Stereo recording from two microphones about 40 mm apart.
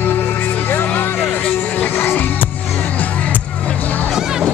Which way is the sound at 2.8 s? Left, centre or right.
Left.